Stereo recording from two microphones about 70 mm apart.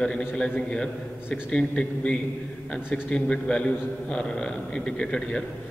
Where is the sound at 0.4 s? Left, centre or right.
Centre.